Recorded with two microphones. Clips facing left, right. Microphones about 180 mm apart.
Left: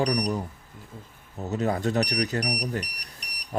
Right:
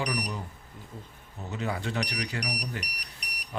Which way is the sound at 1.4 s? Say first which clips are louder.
Left 7 dB; 40° left (ahead or behind).